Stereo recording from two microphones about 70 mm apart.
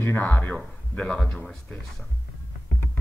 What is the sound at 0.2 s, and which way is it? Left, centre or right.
Speech, left.